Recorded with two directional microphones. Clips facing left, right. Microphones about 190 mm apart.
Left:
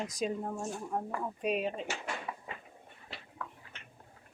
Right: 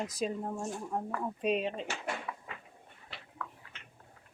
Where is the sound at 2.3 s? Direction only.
20° left (ahead or behind).